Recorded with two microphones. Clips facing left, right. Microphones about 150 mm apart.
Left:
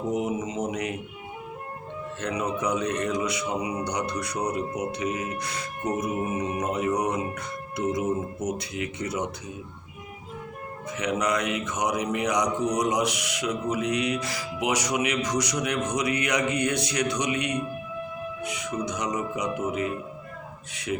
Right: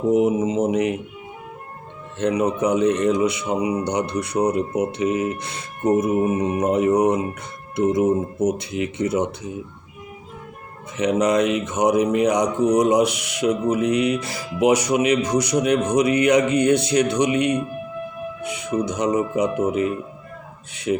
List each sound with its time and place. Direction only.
0.1 s speech: 25° right (ahead or behind)
2.1 s speech: 25° right (ahead or behind)
10.9 s speech: 25° right (ahead or behind)